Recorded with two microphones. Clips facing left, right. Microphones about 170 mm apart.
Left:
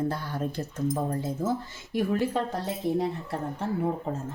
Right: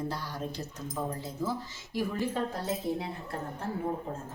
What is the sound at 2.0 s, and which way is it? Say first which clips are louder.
Speech: left 5 dB; 75° left (ahead or behind).